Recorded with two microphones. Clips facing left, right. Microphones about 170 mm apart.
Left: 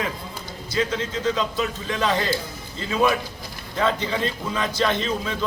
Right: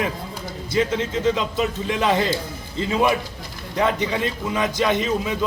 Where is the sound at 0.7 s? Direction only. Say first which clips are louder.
Right 3 dB; 20° right (ahead or behind).